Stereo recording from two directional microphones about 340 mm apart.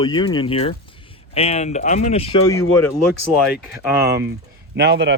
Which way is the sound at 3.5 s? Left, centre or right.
Centre.